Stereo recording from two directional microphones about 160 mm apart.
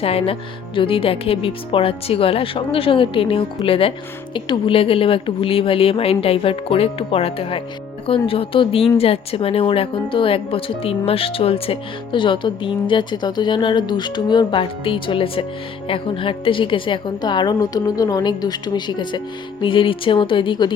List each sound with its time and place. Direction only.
0.0 s a woman's voice: 35° left (ahead or behind)